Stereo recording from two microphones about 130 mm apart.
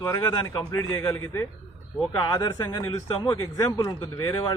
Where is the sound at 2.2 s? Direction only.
30° left (ahead or behind).